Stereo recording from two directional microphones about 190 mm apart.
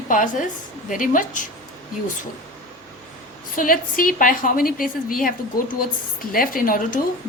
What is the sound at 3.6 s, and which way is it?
A woman's voice, 45° left (ahead or behind).